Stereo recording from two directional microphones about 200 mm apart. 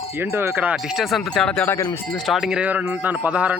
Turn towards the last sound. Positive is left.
turn(degrees=-5)  # may be behind; listen again after turning